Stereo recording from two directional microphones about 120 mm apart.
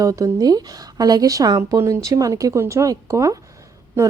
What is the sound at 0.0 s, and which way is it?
A woman's voice, 30° right (ahead or behind).